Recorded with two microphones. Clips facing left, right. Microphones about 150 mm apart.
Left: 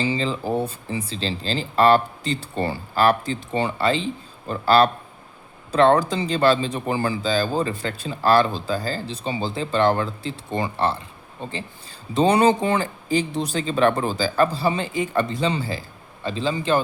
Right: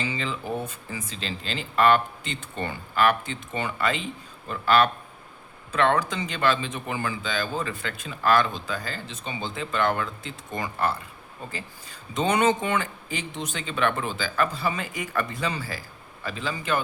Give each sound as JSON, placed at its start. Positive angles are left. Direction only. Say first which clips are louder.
{"t": 0.0, "sound": "a man's voice", "louder": "left 7 dB", "side_deg": 30}